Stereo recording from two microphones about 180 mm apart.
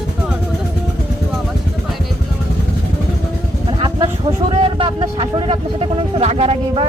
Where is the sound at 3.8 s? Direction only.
25° right (ahead or behind).